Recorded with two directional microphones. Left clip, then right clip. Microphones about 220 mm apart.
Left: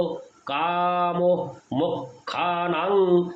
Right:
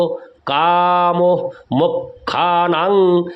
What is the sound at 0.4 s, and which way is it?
Speech, 50° right (ahead or behind).